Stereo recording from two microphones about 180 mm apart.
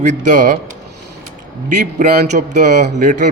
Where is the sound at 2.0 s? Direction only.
45° right (ahead or behind).